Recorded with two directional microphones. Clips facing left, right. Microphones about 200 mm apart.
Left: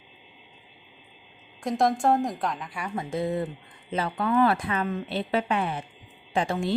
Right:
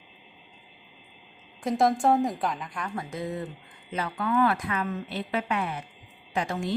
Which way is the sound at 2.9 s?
25° left (ahead or behind).